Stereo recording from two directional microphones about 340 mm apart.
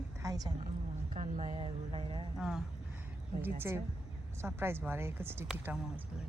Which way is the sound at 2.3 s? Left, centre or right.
Centre.